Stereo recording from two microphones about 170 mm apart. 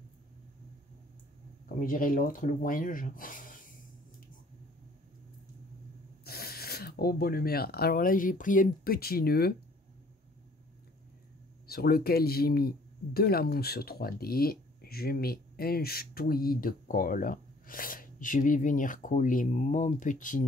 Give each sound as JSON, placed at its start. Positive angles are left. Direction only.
{"t": 1.8, "sound": "speech", "side_deg": 55}
{"t": 6.2, "sound": "speech", "side_deg": 65}
{"t": 11.6, "sound": "speech", "side_deg": 65}